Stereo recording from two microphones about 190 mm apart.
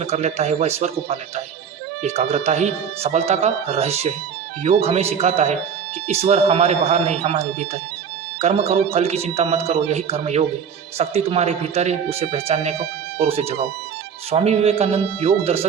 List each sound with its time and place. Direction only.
0.0 s speech: 35° right (ahead or behind)